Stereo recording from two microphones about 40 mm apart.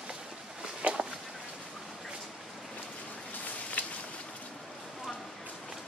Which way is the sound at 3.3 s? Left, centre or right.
Left.